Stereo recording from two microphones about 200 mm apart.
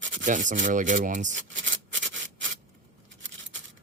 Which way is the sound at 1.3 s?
70° right (ahead or behind).